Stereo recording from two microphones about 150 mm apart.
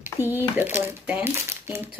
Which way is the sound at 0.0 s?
15° right (ahead or behind).